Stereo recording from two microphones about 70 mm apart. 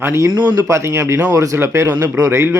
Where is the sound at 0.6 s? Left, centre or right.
Right.